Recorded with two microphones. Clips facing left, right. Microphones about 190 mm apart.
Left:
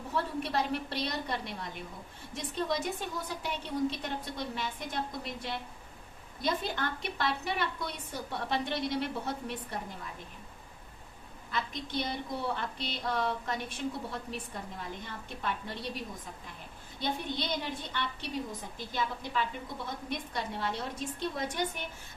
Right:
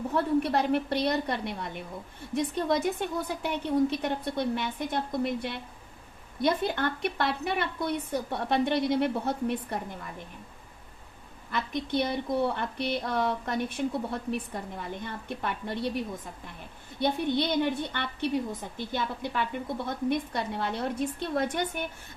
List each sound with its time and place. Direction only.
0.1 s a woman's voice: 55° right (ahead or behind)
11.5 s a woman's voice: 60° right (ahead or behind)
17.0 s a woman's voice: 60° right (ahead or behind)